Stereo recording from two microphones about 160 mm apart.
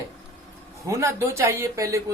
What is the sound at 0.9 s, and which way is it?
Speech, 20° right (ahead or behind).